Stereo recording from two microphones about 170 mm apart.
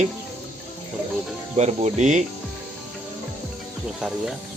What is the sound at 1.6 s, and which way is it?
Speech, 40° right (ahead or behind).